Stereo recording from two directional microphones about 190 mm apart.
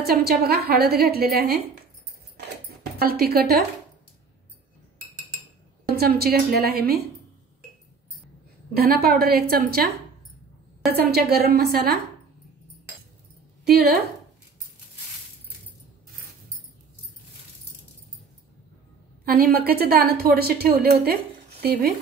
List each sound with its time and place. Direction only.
0.0 s a woman's voice: 55° right (ahead or behind)
2.3 s dishes: 55° right (ahead or behind)
5.9 s a woman's voice: 55° right (ahead or behind)
8.7 s a woman's voice: 55° right (ahead or behind)
10.9 s a woman's voice: 55° right (ahead or behind)
19.2 s a woman's voice: 50° right (ahead or behind)